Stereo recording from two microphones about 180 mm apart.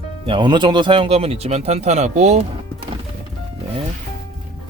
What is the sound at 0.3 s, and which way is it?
Speech, 25° right (ahead or behind).